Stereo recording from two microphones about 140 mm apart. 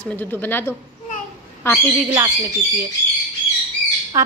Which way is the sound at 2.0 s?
20° right (ahead or behind).